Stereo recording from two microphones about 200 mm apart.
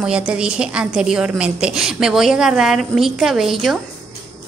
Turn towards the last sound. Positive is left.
turn(degrees=0)  # may be behind; listen again after turning